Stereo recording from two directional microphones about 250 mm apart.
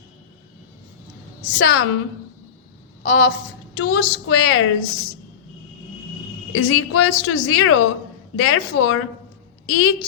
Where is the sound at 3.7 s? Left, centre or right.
Left.